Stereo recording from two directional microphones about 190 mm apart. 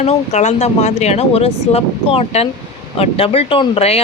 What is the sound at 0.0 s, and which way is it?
Speech, 35° left (ahead or behind).